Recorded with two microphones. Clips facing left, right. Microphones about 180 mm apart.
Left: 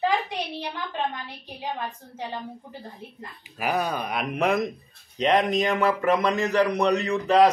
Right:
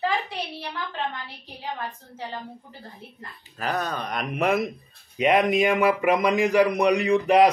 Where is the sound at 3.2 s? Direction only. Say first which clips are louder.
Left 1 dB; 10° left (ahead or behind); by 7.5 s 15° right (ahead or behind).